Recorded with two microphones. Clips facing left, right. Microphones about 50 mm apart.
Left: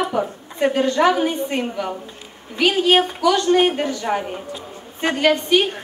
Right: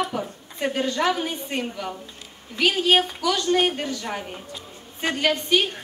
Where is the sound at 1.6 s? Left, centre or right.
Centre.